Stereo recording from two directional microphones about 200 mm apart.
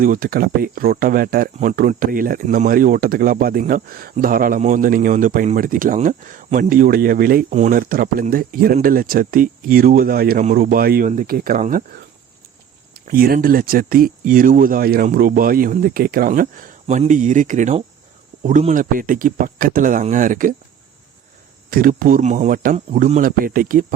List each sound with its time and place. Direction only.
0.0 s speech: 45° right (ahead or behind)
13.1 s speech: 45° right (ahead or behind)
21.7 s speech: 45° right (ahead or behind)